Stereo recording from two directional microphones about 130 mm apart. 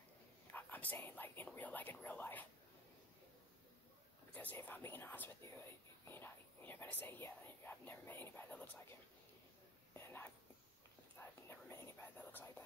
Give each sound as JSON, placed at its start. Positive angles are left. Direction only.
{"t": 0.5, "sound": "speech", "side_deg": 15}
{"t": 4.3, "sound": "speech", "side_deg": 15}
{"t": 6.0, "sound": "whispering", "side_deg": 15}
{"t": 9.9, "sound": "whispering", "side_deg": 15}